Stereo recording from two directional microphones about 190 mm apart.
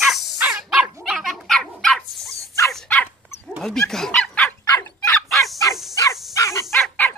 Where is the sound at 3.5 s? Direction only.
5° left (ahead or behind).